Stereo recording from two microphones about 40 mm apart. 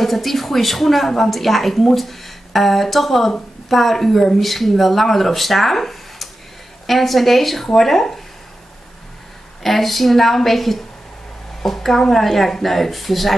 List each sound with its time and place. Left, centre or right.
0.0 s a woman's voice: centre
9.6 s a woman's voice: centre